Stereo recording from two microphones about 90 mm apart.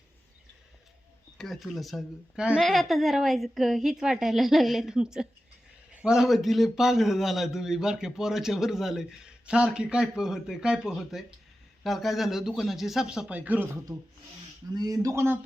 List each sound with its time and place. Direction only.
1.4 s a man's voice: centre (ahead or behind)
5.9 s a sound: 15° right (ahead or behind)
6.1 s a man's voice: centre (ahead or behind); by 13.7 s 20° right (ahead or behind)
13.9 s a man's voice: 5° right (ahead or behind)
14.8 s speech: 45° right (ahead or behind)
15.1 s speech: 30° right (ahead or behind)